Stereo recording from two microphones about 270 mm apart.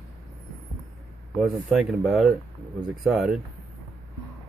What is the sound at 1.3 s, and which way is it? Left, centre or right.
Speech, centre.